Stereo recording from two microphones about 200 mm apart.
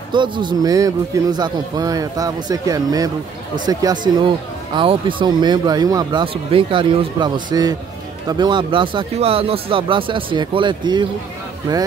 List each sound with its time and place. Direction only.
0.1 s a man's voice: 20° right (ahead or behind)